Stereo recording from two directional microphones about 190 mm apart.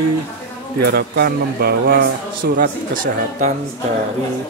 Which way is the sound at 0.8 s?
55° right (ahead or behind).